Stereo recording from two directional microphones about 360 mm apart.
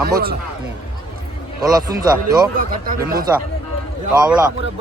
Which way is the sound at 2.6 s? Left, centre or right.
Right.